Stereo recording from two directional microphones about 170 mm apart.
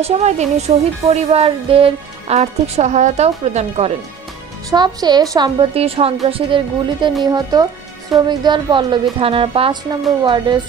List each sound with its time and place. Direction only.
0.0 s a woman's voice: 40° right (ahead or behind)
4.6 s a woman's voice: 25° right (ahead or behind)